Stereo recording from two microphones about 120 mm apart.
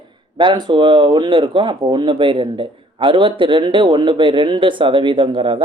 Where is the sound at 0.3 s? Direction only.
40° right (ahead or behind).